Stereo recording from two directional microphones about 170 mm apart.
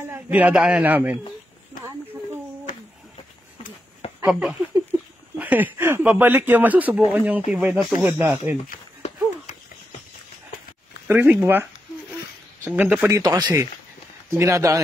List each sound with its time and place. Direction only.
0.1 s speech: 10° right (ahead or behind)
4.3 s speech: 5° right (ahead or behind)
8.6 s run: 45° left (ahead or behind)
11.1 s speech: 10° right (ahead or behind)
12.6 s speech: 10° right (ahead or behind)